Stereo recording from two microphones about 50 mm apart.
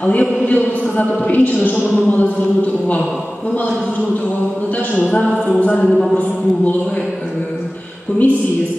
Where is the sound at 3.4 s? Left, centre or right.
Left.